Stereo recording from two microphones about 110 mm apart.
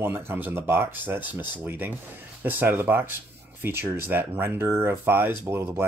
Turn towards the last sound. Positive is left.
turn(degrees=-20)  # may be behind; listen again after turning